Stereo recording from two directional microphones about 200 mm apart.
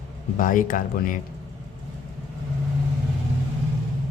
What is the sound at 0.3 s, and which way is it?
Speech, 40° left (ahead or behind).